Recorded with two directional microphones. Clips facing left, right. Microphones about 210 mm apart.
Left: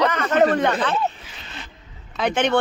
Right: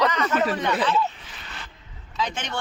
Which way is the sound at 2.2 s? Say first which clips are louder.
Left 9 dB; 60° left (ahead or behind).